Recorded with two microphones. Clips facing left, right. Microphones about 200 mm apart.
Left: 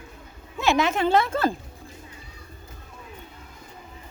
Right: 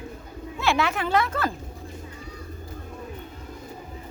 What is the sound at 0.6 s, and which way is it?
Speech, 20° left (ahead or behind).